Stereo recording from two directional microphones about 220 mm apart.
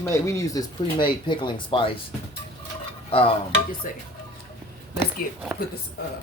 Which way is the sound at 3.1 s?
25° left (ahead or behind).